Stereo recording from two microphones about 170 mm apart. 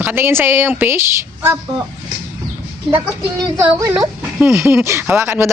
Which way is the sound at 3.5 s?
15° right (ahead or behind).